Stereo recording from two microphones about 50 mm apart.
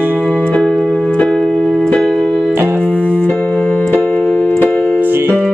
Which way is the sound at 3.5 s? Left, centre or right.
Centre.